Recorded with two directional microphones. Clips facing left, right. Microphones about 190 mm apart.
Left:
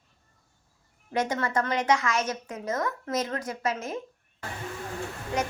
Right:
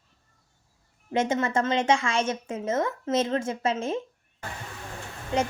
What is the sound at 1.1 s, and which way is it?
A woman's voice, 25° right (ahead or behind).